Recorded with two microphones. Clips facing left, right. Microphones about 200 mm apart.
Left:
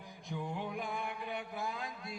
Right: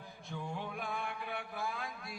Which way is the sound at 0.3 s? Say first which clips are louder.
Left 2 dB; 15° left (ahead or behind).